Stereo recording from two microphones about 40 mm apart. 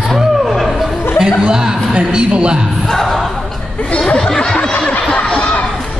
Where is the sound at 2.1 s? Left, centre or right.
Right.